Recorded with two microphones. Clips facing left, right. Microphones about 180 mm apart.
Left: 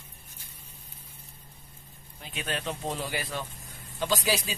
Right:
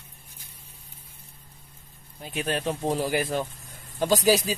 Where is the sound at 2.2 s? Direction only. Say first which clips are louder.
Right 6 dB; 40° right (ahead or behind).